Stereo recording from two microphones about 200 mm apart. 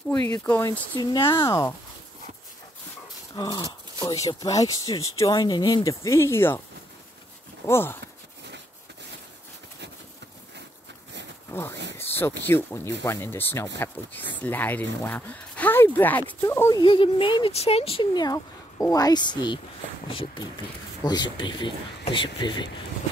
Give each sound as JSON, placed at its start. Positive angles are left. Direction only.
{"t": 0.4, "sound": "speech", "side_deg": 10}
{"t": 3.3, "sound": "speech", "side_deg": 20}
{"t": 7.6, "sound": "speech", "side_deg": 10}
{"t": 11.5, "sound": "speech", "side_deg": 10}
{"t": 16.8, "sound": "speech", "side_deg": 25}